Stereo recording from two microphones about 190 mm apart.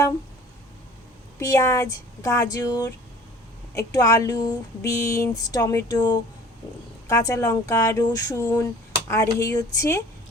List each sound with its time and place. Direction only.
1.4 s speech: 15° left (ahead or behind)